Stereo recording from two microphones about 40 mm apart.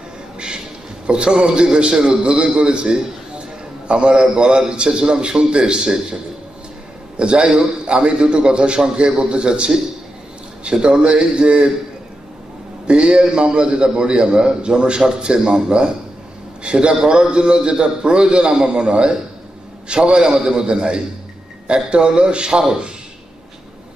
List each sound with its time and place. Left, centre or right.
1.0 s a man's voice: right
7.2 s a man's voice: right
12.8 s a man's voice: right